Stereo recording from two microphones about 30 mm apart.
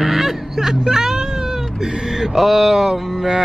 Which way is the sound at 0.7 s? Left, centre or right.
Centre.